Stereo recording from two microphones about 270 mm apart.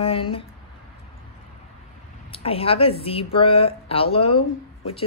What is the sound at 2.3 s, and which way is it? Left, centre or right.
A woman's voice, left.